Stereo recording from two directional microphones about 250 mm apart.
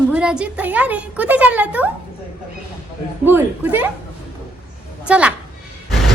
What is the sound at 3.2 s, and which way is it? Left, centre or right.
Speech, centre.